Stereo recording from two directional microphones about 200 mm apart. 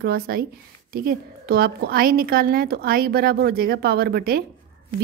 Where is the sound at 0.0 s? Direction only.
50° right (ahead or behind).